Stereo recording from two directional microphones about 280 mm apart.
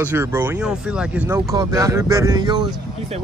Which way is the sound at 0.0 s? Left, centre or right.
Centre.